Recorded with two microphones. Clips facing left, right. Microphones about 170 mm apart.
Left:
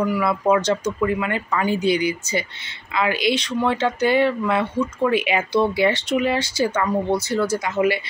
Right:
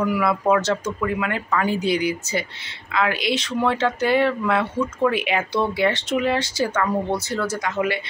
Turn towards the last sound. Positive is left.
turn(degrees=5)  # may be behind; listen again after turning